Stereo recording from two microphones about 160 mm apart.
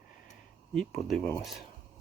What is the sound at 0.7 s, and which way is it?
Speech, centre (ahead or behind).